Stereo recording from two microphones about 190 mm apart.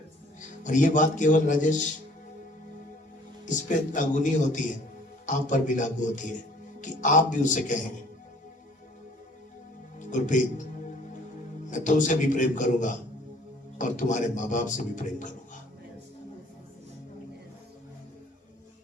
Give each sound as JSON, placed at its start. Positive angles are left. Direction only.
{"t": 0.6, "sound": "speech", "side_deg": 40}
{"t": 3.4, "sound": "speech", "side_deg": 40}
{"t": 10.0, "sound": "speech", "side_deg": 40}
{"t": 11.7, "sound": "speech", "side_deg": 40}